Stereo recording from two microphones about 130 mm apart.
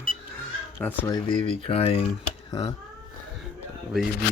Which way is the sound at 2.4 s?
30° left (ahead or behind).